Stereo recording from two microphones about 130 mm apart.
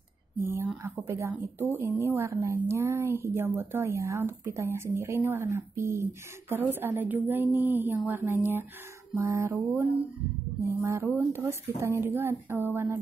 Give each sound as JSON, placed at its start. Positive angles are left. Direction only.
{"t": 0.4, "sound": "a woman's voice", "side_deg": -20}